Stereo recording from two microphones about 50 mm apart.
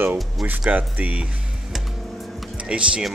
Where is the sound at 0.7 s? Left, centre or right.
Right.